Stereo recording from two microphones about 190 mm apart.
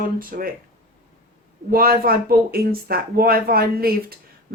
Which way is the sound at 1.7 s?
50° right (ahead or behind).